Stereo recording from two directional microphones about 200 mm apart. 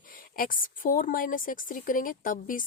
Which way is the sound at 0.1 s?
45° left (ahead or behind).